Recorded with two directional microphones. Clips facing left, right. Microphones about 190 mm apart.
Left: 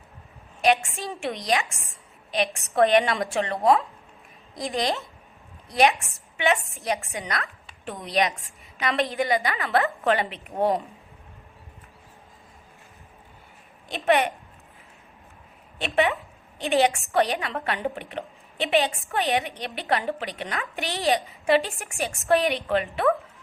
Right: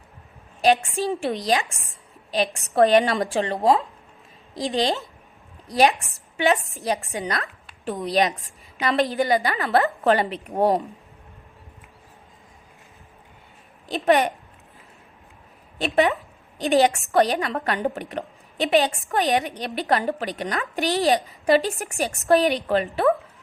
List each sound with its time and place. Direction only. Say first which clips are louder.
0.6 s a woman's voice: right 3 dB; 35° right (ahead or behind)
13.8 s a woman's voice: right 3 dB; 35° right (ahead or behind)
15.8 s a woman's voice: right 3 dB; 40° right (ahead or behind)